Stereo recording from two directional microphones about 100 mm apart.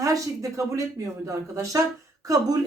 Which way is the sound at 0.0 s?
35° right (ahead or behind).